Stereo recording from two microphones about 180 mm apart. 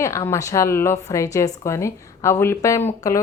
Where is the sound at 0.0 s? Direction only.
15° left (ahead or behind).